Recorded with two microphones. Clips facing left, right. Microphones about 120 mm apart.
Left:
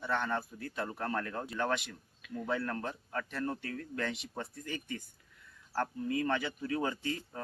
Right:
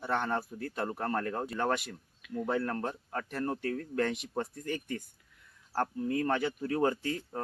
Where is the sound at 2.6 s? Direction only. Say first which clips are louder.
Right 3 dB; 30° right (ahead or behind).